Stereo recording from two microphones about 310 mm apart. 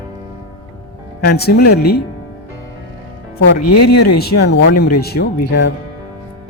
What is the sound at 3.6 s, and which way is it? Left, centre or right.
Speech, left.